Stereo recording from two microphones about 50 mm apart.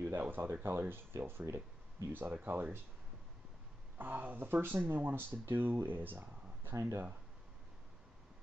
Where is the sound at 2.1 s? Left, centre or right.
Right.